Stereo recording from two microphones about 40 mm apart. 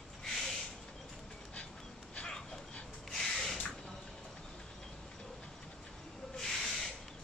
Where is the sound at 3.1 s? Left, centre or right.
Centre.